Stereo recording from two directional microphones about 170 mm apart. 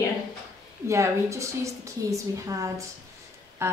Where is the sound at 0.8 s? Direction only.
15° right (ahead or behind).